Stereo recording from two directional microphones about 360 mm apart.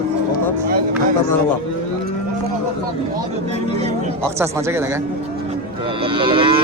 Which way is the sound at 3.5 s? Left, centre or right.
Centre.